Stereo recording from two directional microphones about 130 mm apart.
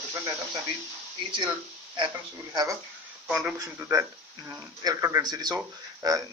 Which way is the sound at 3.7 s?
20° right (ahead or behind).